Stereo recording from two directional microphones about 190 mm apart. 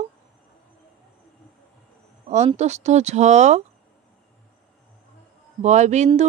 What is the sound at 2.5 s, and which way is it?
Speech, 35° right (ahead or behind).